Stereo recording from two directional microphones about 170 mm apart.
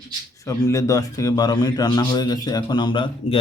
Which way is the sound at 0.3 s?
20° left (ahead or behind).